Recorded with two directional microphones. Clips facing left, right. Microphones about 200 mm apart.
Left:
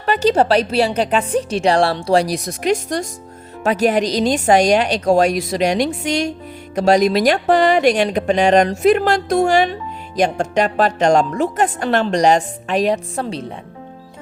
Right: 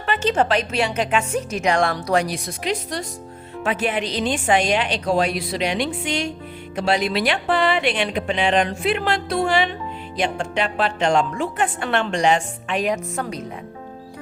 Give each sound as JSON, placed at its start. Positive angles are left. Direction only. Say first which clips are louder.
{"t": 0.0, "sound": "a woman's voice", "louder": "left 5 dB", "side_deg": 40}